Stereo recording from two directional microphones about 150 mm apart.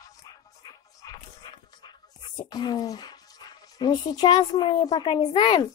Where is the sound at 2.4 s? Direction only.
25° left (ahead or behind).